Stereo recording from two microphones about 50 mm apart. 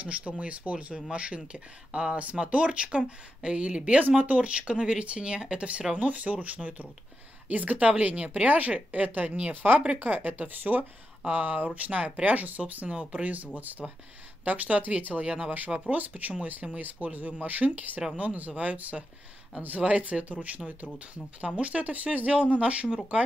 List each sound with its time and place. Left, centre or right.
0.0 s speech: right